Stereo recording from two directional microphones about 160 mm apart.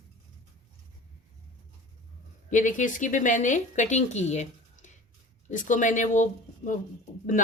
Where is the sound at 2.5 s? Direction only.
50° left (ahead or behind).